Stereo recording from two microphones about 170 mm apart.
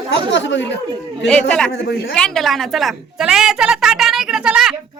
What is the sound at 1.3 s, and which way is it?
Speech, 5° left (ahead or behind).